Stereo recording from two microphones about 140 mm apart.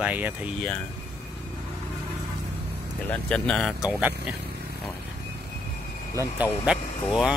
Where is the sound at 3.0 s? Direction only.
10° left (ahead or behind).